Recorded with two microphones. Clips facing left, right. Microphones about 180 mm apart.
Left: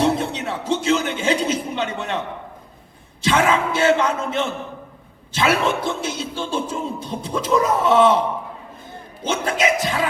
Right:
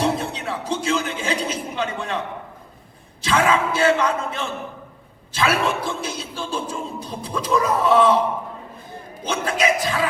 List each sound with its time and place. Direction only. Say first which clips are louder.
0.0 s a sound: left 3 dB; 25° left (ahead or behind)
3.2 s speech: left 1 dB; 25° left (ahead or behind)
9.2 s speech: left 1 dB; 25° left (ahead or behind)